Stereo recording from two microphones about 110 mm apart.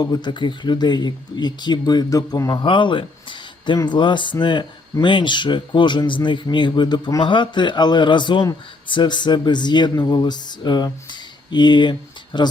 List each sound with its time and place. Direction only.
0.0 s speech: 40° left (ahead or behind)